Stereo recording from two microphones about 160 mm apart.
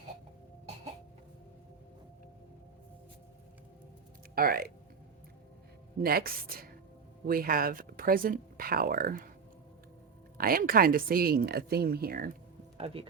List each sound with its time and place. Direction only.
4.4 s speech: 70° right (ahead or behind)
6.0 s speech: 70° right (ahead or behind)
10.3 s speech: 65° right (ahead or behind)
12.7 s speech: 35° right (ahead or behind)